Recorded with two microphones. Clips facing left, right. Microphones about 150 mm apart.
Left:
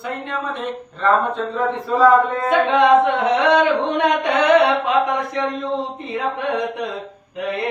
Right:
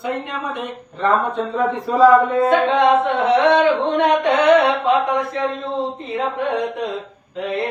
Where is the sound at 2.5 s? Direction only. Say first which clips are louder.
Left 3 dB; 15° left (ahead or behind).